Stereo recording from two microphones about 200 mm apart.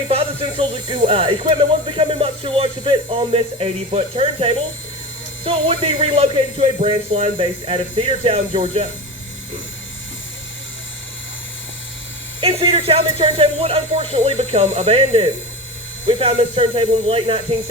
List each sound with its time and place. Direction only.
0.1 s speech: 30° right (ahead or behind)
12.4 s speech: 25° right (ahead or behind)